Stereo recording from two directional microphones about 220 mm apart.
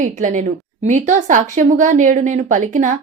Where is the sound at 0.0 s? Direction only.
35° right (ahead or behind).